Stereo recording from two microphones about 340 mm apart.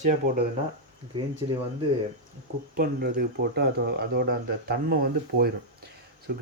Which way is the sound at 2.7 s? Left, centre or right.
Right.